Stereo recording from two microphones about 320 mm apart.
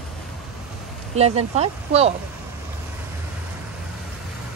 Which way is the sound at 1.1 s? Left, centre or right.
Centre.